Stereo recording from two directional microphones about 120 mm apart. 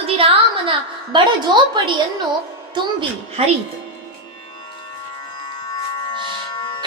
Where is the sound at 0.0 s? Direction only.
50° right (ahead or behind).